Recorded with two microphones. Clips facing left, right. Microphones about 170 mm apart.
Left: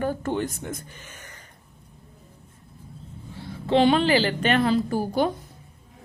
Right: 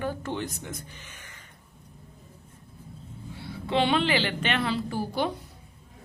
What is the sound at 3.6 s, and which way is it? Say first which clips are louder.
A woman's voice: left 5 dB; 40° left (ahead or behind).